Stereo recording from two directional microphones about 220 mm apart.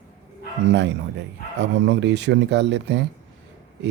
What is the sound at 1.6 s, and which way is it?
Speech, 55° right (ahead or behind).